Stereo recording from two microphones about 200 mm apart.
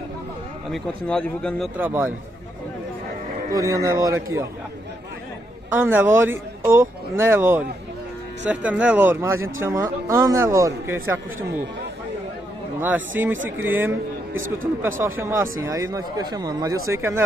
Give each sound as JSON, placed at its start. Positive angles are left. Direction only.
{"t": 0.7, "sound": "speech", "side_deg": 5}
{"t": 1.8, "sound": "speech", "side_deg": -10}
{"t": 3.5, "sound": "speech", "side_deg": -15}
{"t": 5.7, "sound": "speech", "side_deg": -10}
{"t": 13.1, "sound": "speech", "side_deg": -10}
{"t": 15.0, "sound": "speech", "side_deg": -10}